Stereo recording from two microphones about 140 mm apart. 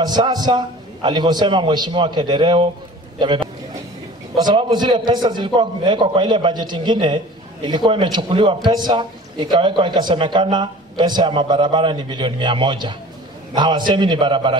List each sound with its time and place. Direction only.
0.0 s a man's voice: 30° right (ahead or behind)